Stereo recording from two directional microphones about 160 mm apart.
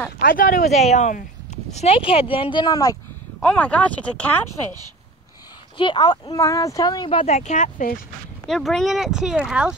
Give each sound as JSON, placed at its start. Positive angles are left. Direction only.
{"t": 0.2, "sound": "speech", "side_deg": 60}
{"t": 3.4, "sound": "speech", "side_deg": 10}
{"t": 5.8, "sound": "speech", "side_deg": 30}
{"t": 8.5, "sound": "speech", "side_deg": 0}